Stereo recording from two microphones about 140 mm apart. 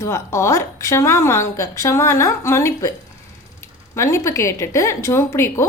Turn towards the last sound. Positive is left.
turn(degrees=20)  # may be behind; listen again after turning